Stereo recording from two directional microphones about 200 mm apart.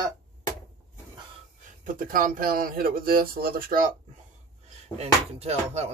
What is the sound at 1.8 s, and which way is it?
Speech, 45° right (ahead or behind).